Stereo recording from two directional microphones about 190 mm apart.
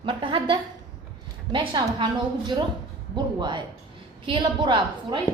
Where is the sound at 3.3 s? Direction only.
25° right (ahead or behind).